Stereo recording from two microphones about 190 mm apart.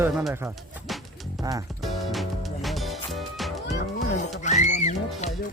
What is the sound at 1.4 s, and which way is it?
Speech, 20° right (ahead or behind).